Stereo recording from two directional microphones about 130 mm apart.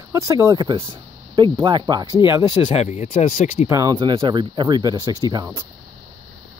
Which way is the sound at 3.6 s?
25° right (ahead or behind).